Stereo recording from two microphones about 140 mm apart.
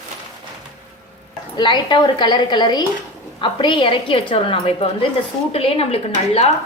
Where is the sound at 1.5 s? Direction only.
35° left (ahead or behind).